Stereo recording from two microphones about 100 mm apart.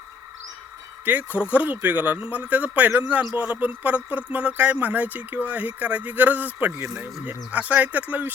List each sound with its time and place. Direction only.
1.0 s speech: 15° right (ahead or behind)